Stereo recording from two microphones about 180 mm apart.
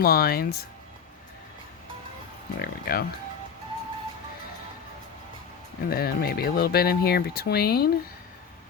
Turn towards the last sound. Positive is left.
turn(degrees=60)  # may be behind; listen again after turning